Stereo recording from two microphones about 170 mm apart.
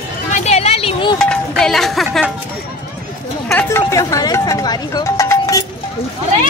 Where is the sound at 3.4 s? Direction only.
15° left (ahead or behind).